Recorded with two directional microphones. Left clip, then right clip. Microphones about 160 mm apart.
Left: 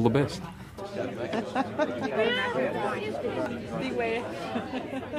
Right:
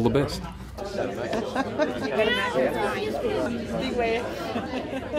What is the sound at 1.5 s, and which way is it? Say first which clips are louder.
Chatter: right 1 dB; 50° left (ahead or behind).